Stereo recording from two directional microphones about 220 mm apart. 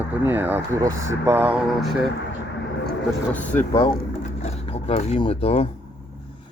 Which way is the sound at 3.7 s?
25° left (ahead or behind).